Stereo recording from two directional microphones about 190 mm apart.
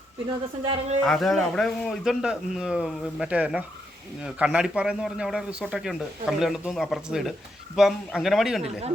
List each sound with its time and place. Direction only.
0.6 s a man's voice: 30° right (ahead or behind)
1.0 s speech: centre (ahead or behind)